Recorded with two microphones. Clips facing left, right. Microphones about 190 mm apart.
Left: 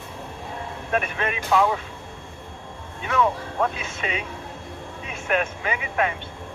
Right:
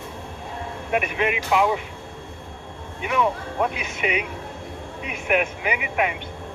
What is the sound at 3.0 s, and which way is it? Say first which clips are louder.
Speech: even; 15° right (ahead or behind).